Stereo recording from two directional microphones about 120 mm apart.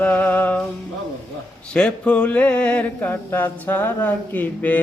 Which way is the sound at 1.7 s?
10° left (ahead or behind).